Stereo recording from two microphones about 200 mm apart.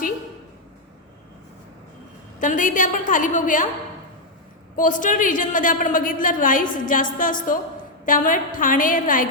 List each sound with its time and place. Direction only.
2.4 s a woman's voice: 40° left (ahead or behind)
4.8 s a woman's voice: 40° left (ahead or behind)